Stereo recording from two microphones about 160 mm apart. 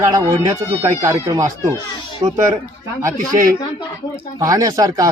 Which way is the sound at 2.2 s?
35° right (ahead or behind).